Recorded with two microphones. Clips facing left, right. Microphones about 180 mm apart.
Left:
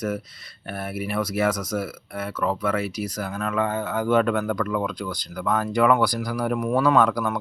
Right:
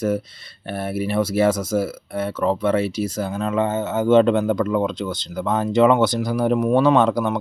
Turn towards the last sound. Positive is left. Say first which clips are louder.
# right 3 dB
turn(degrees=-25)  # may be behind; listen again after turning